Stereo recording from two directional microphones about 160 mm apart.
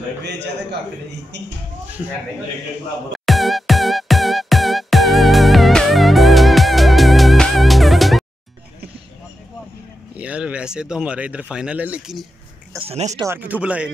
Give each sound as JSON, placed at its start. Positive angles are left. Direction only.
{"t": 0.2, "sound": "a man's voice", "side_deg": -90}
{"t": 3.3, "sound": "music", "side_deg": 0}
{"t": 10.1, "sound": "speech", "side_deg": -5}
{"t": 12.8, "sound": "speech", "side_deg": -40}
{"t": 13.1, "sound": "speech", "side_deg": -20}
{"t": 13.4, "sound": "speech", "side_deg": -10}